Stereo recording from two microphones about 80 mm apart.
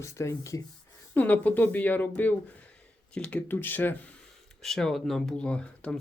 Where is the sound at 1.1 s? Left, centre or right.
Left.